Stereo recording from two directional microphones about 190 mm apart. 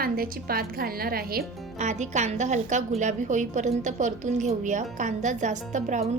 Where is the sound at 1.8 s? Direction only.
40° right (ahead or behind).